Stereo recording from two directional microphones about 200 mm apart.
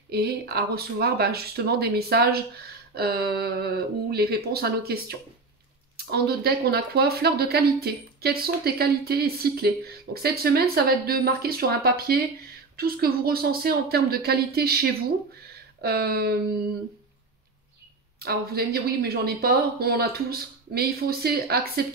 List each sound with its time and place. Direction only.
0.1 s speech: 50° right (ahead or behind)
18.2 s speech: 50° right (ahead or behind)